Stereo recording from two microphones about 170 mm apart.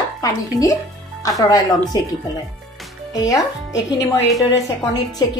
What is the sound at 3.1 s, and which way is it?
A woman's voice, 20° left (ahead or behind).